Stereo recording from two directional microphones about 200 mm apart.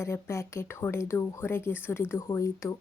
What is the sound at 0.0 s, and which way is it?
Speech, 15° left (ahead or behind).